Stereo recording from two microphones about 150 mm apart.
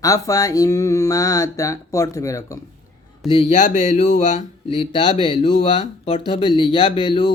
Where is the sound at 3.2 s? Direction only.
35° left (ahead or behind).